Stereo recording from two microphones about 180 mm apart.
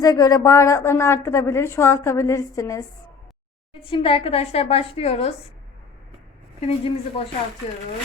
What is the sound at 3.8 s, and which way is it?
A woman's voice, 30° left (ahead or behind).